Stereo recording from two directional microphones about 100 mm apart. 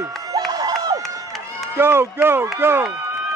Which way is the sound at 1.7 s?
25° right (ahead or behind).